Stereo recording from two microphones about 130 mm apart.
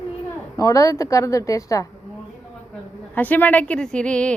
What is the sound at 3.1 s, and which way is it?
A woman's voice, 15° left (ahead or behind).